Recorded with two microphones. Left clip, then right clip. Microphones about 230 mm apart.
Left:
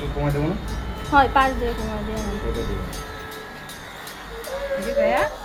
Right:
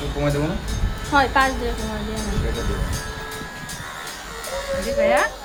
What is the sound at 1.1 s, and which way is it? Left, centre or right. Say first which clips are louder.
Speech: left 1 dB; centre.